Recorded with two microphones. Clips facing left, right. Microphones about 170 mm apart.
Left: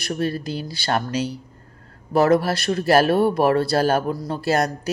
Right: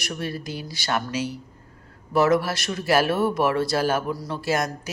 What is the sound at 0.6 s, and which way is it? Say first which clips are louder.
Speech: left 4 dB; 60° left (ahead or behind).